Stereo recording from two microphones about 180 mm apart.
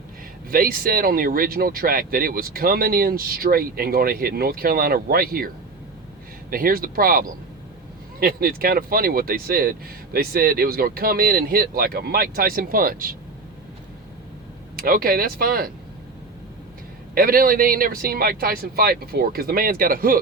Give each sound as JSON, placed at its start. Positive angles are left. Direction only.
{"t": 0.5, "sound": "speech", "side_deg": -55}
{"t": 6.5, "sound": "speech", "side_deg": -55}
{"t": 14.8, "sound": "speech", "side_deg": -55}
{"t": 17.2, "sound": "speech", "side_deg": -55}